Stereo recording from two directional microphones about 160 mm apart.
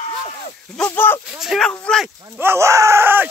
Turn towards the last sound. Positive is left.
turn(degrees=-15)  # may be behind; listen again after turning